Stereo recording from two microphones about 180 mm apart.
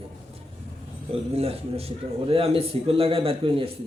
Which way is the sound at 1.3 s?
35° right (ahead or behind).